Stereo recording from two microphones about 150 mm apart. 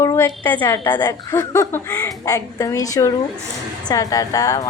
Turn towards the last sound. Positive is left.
turn(degrees=25)  # may be behind; listen again after turning